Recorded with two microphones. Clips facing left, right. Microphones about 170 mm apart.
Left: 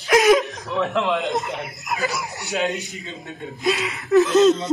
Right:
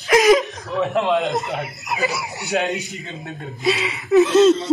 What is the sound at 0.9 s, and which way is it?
Speech, 40° right (ahead or behind).